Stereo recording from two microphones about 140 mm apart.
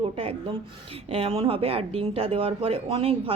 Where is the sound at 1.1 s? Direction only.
40° right (ahead or behind).